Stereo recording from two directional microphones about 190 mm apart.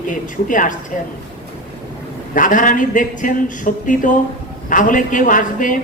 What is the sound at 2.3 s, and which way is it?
A man's voice, 45° left (ahead or behind).